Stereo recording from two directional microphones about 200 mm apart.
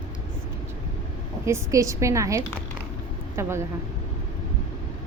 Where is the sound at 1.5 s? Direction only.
15° right (ahead or behind).